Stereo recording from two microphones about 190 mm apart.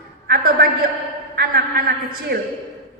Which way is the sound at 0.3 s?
50° right (ahead or behind).